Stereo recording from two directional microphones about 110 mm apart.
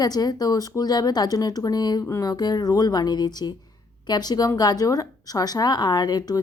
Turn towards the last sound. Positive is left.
turn(degrees=35)  # may be behind; listen again after turning